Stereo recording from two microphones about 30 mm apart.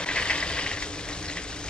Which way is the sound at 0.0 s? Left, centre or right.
Left.